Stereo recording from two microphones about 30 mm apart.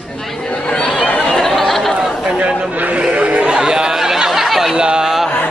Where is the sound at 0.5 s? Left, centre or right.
Left.